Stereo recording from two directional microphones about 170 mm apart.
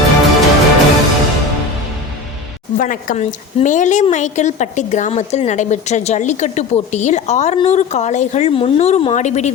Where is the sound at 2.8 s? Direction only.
50° left (ahead or behind).